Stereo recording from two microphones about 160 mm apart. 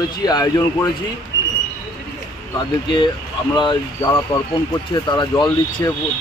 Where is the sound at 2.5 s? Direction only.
30° left (ahead or behind).